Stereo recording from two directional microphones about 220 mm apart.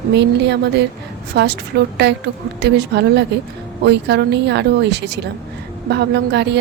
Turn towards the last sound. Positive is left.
turn(degrees=-50)  # may be behind; listen again after turning